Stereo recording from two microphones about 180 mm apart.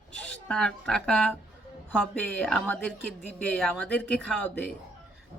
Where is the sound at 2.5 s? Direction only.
5° left (ahead or behind).